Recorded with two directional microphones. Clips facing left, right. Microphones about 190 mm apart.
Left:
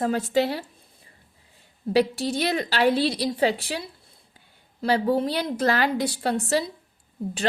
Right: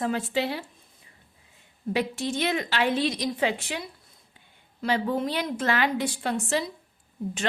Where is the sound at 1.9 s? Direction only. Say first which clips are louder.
Left 5 dB; 35° left (ahead or behind).